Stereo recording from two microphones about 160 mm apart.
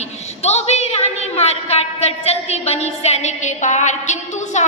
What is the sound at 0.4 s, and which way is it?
A woman's voice, 45° left (ahead or behind).